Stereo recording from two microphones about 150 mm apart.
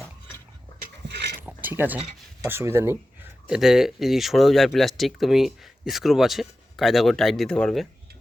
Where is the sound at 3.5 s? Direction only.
5° right (ahead or behind).